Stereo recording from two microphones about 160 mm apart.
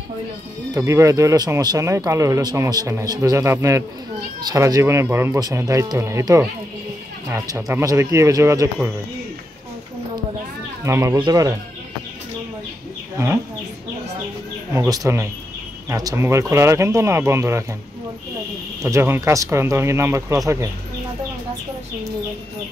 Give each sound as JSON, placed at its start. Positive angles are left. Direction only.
{"t": 0.7, "sound": "speech", "side_deg": -20}
{"t": 10.9, "sound": "speech", "side_deg": -15}
{"t": 14.7, "sound": "speech", "side_deg": -15}
{"t": 18.8, "sound": "speech", "side_deg": -20}